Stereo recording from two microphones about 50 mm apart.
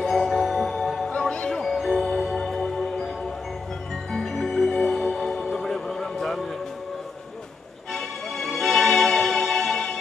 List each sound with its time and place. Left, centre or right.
0.1 s music: centre
1.1 s music: centre
1.5 s music: centre
4.1 s music: centre
7.9 s music: centre